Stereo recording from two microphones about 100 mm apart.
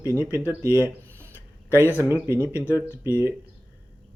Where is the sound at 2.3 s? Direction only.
25° left (ahead or behind).